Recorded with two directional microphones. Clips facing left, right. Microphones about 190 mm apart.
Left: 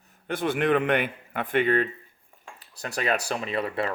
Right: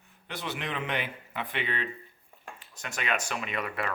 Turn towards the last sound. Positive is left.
turn(degrees=30)  # may be behind; listen again after turning